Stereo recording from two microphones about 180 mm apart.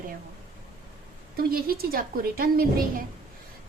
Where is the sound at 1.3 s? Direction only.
55° right (ahead or behind).